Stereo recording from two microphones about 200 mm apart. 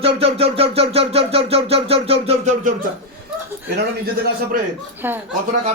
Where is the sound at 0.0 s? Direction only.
30° right (ahead or behind).